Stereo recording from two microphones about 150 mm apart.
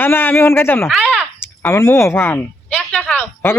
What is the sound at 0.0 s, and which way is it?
Speech, 15° left (ahead or behind).